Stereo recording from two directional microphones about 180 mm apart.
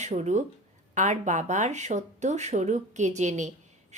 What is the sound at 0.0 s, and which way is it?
Speech, 40° right (ahead or behind).